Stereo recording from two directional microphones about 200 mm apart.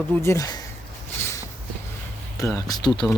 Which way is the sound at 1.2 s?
15° left (ahead or behind).